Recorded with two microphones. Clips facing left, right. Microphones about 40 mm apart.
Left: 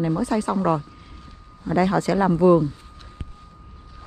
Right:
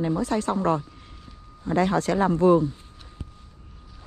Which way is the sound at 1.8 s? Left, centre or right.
Left.